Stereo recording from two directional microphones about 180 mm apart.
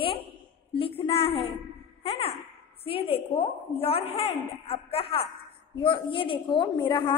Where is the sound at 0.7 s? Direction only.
30° left (ahead or behind).